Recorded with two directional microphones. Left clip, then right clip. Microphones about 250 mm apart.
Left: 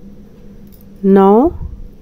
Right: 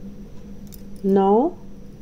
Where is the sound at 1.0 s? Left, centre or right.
Left.